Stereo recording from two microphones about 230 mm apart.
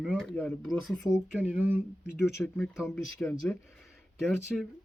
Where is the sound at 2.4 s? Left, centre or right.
Centre.